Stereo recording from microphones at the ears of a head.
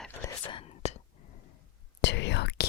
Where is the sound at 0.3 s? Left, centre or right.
Left.